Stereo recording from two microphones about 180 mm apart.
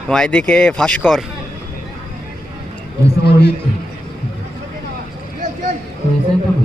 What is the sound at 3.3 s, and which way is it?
Speech, 65° left (ahead or behind).